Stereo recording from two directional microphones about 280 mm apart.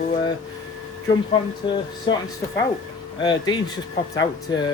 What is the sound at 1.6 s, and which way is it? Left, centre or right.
Speech, centre.